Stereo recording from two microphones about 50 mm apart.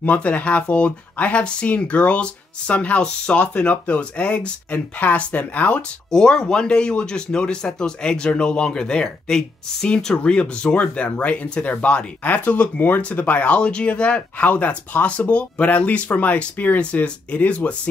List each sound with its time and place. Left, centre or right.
0.0 s speech: left
6.1 s speech: centre